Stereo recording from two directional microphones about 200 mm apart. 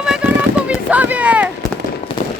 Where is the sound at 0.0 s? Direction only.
5° right (ahead or behind).